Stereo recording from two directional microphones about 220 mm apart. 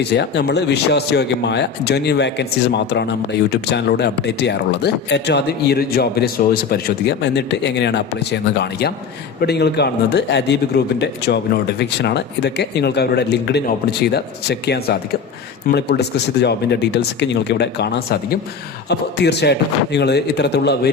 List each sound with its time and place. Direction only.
0.0 s speech: 50° left (ahead or behind)
11.8 s speech: 50° left (ahead or behind)